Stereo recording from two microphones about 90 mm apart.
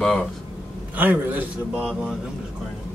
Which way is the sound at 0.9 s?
20° right (ahead or behind).